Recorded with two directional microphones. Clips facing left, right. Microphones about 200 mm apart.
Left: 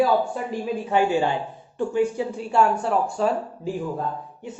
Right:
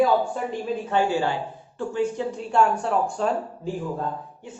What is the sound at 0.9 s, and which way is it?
Speech, 15° left (ahead or behind).